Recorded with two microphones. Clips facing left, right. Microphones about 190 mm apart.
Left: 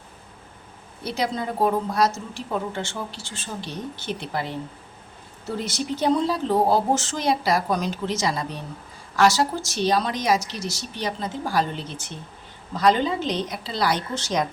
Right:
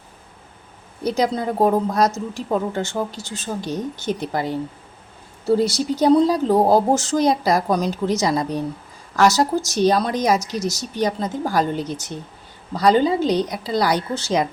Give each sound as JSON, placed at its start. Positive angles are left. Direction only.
{"t": 1.0, "sound": "a woman's voice", "side_deg": -40}
{"t": 5.5, "sound": "a woman's voice", "side_deg": -35}
{"t": 13.8, "sound": "a woman's voice", "side_deg": -15}